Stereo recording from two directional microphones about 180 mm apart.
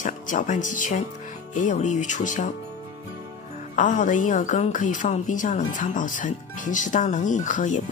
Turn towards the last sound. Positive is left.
turn(degrees=45)  # may be behind; listen again after turning